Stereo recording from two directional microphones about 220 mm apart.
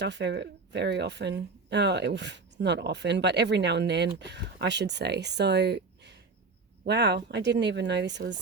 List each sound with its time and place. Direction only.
0.0 s speech: 50° right (ahead or behind)